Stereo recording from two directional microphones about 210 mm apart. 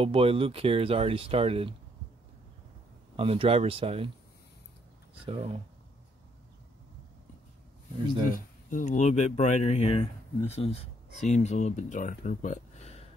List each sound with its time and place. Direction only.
0.0 s speech: 25° right (ahead or behind)
3.2 s speech: 25° right (ahead or behind)
5.2 s speech: 25° right (ahead or behind)
8.3 s speech: 40° left (ahead or behind)